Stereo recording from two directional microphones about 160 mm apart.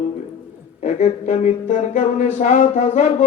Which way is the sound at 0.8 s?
50° left (ahead or behind).